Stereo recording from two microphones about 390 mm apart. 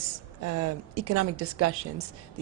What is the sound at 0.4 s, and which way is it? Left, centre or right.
A woman's voice, right.